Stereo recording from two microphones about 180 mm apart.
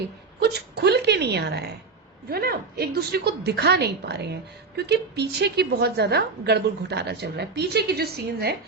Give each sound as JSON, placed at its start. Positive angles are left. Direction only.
{"t": 0.8, "sound": "a woman's voice", "side_deg": -65}